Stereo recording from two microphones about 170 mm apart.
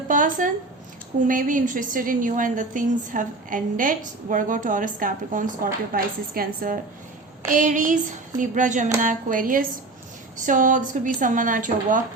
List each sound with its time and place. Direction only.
0.1 s a woman's voice: 50° right (ahead or behind)